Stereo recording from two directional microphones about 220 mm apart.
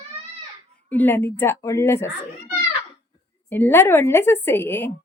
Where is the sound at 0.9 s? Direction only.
10° left (ahead or behind).